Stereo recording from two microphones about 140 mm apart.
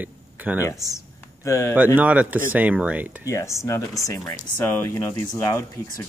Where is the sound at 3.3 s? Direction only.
20° left (ahead or behind).